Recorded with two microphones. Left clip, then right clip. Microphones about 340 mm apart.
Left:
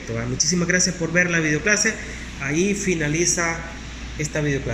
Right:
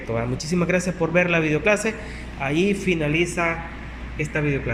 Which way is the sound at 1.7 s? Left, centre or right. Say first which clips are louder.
Left 2 dB; right.